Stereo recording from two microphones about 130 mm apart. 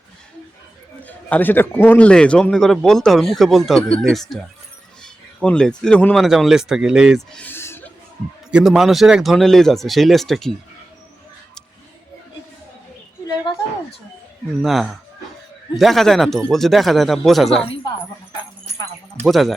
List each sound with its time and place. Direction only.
1.0 s a man's voice: 15° left (ahead or behind); by 7.2 s 5° right (ahead or behind)
7.3 s a sound: 15° left (ahead or behind)
8.4 s a man's voice: 5° right (ahead or behind)
14.6 s a man's voice: centre (ahead or behind)
19.2 s a man's voice: centre (ahead or behind)